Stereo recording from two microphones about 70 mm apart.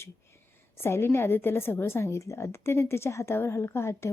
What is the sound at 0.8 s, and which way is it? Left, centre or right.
A woman's voice, left.